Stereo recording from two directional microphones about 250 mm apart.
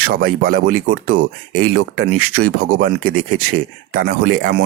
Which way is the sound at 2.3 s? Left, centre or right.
Right.